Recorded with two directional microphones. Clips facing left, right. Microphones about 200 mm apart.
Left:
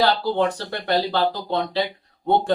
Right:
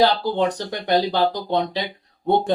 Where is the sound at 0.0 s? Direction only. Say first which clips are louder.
Right 1 dB; 15° right (ahead or behind).